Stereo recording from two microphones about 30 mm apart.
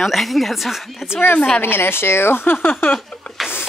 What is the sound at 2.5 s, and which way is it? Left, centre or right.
Speech, left.